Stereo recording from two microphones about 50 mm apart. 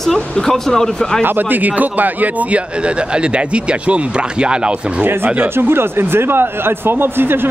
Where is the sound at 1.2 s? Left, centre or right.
Right.